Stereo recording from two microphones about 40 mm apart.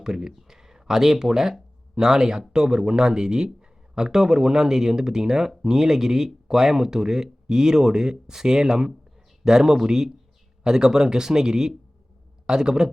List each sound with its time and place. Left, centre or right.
0.0 s speech: centre